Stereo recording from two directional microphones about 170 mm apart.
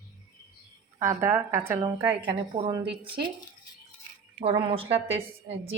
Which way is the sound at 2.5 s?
30° right (ahead or behind).